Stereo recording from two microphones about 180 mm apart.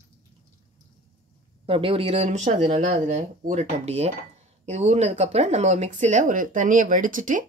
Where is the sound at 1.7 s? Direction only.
30° right (ahead or behind).